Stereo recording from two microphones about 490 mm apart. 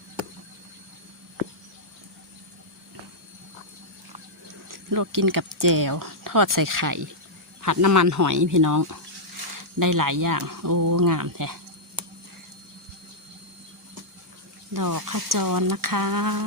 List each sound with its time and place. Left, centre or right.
4.7 s speech: right
14.7 s speech: right